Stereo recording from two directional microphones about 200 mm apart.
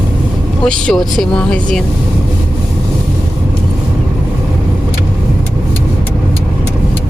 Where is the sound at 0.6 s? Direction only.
5° left (ahead or behind).